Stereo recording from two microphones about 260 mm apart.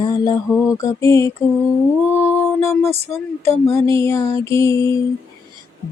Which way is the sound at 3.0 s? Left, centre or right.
Right.